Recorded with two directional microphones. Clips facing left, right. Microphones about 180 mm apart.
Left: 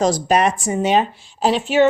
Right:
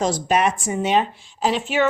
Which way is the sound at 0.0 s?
40° left (ahead or behind).